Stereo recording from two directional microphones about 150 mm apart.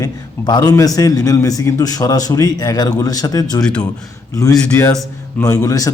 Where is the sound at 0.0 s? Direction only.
25° left (ahead or behind).